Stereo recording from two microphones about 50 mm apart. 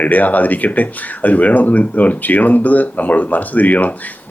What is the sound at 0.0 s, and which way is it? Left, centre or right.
Speech, left.